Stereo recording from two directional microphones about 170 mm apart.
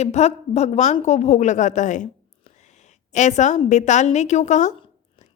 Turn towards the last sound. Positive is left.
turn(degrees=45)  # may be behind; listen again after turning